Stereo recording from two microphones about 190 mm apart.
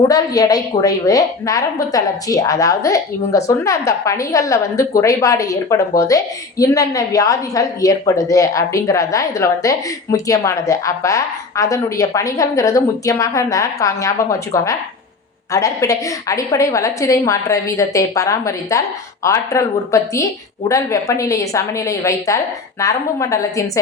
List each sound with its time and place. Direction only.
0.1 s a woman's voice: 20° left (ahead or behind)